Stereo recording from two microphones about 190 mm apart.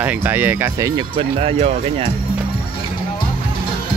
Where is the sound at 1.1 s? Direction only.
30° right (ahead or behind).